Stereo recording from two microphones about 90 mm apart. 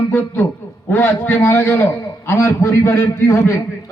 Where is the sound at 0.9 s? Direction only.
25° left (ahead or behind).